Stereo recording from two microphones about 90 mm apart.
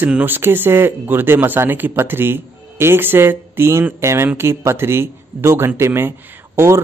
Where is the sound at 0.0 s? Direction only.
20° right (ahead or behind).